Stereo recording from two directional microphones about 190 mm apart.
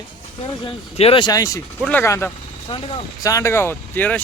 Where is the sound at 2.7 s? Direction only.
30° left (ahead or behind).